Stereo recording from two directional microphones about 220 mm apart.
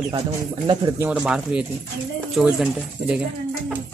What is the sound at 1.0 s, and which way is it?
A man's voice, 5° right (ahead or behind).